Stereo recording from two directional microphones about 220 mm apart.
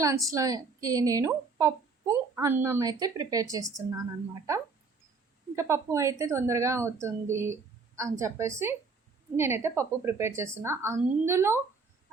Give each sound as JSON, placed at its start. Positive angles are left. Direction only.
{"t": 0.0, "sound": "a woman's voice", "side_deg": -15}